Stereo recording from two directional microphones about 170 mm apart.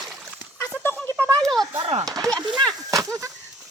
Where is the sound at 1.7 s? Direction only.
35° right (ahead or behind).